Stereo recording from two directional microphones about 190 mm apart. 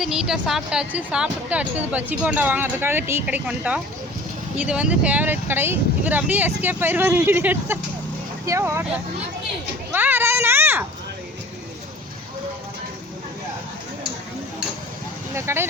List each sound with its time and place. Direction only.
0.0 s a woman's voice: 5° right (ahead or behind)
9.9 s a sound: 10° right (ahead or behind)
15.4 s a woman's voice: 15° right (ahead or behind)